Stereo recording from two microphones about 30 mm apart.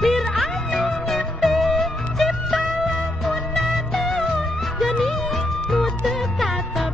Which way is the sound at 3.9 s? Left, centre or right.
Centre.